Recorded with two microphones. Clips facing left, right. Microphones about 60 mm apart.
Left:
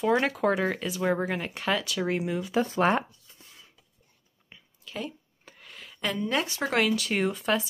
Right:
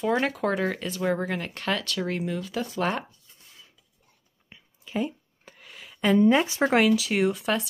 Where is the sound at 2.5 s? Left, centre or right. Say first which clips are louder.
Left 7 dB; left.